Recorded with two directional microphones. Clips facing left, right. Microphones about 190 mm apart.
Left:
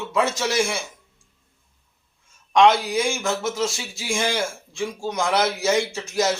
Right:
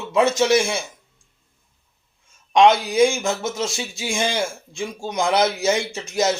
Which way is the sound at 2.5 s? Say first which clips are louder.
Right 1 dB; 20° right (ahead or behind).